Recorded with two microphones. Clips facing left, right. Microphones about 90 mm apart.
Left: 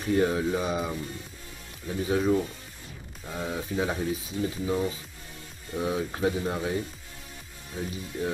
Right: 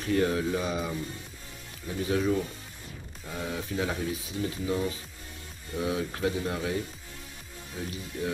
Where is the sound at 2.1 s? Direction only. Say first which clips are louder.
Left 2 dB; 25° left (ahead or behind).